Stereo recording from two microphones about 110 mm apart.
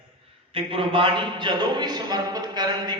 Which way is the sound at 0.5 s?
55° right (ahead or behind).